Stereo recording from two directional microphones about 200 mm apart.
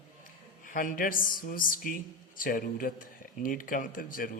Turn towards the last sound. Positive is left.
turn(degrees=45)  # may be behind; listen again after turning